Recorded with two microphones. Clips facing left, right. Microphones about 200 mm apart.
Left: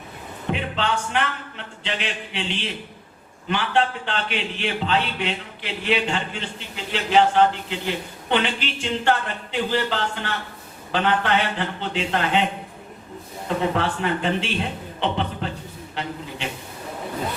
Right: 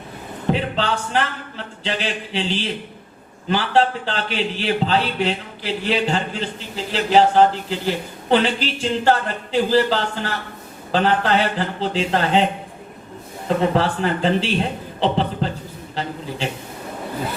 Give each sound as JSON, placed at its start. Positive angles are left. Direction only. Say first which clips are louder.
{"t": 0.5, "sound": "a man's voice", "louder": "right 3 dB", "side_deg": -35}
{"t": 13.6, "sound": "a man's voice", "louder": "right 4 dB", "side_deg": -35}